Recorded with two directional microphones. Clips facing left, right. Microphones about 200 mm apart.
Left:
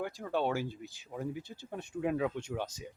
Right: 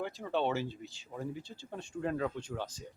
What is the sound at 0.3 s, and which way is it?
Speech, 10° left (ahead or behind).